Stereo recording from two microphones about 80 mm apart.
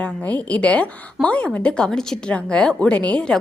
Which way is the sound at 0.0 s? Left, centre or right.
Centre.